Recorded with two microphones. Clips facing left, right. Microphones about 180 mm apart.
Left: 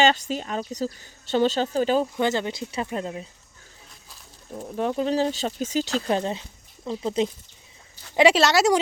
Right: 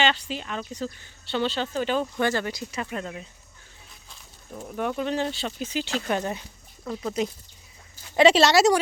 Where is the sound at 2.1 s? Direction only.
20° left (ahead or behind).